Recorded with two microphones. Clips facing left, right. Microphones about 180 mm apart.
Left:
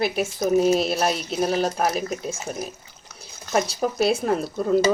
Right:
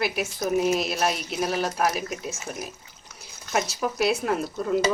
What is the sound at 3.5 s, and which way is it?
Speech, 35° left (ahead or behind).